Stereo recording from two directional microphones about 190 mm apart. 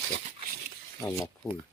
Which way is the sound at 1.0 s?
10° left (ahead or behind).